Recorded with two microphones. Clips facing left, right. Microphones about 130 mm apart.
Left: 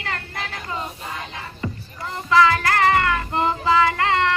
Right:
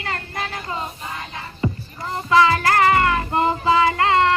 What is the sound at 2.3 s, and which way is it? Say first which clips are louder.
Child singing: right 1 dB; 25° right (ahead or behind).